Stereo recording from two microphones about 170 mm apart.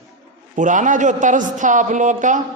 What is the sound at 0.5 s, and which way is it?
A man's voice, 50° right (ahead or behind).